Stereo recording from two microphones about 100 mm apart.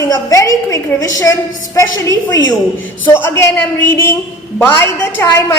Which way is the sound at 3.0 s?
25° left (ahead or behind).